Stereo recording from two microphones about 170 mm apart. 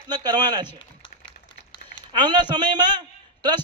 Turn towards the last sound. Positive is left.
turn(degrees=-25)  # may be behind; listen again after turning